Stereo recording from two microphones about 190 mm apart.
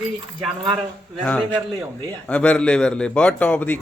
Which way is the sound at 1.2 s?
5° left (ahead or behind).